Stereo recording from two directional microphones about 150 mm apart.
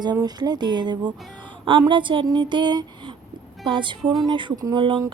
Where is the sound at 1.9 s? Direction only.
35° right (ahead or behind).